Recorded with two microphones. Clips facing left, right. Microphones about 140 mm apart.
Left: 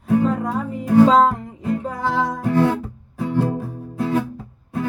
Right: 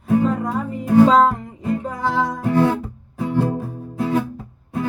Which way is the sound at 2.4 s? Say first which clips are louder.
Right 1 dB; 20° right (ahead or behind).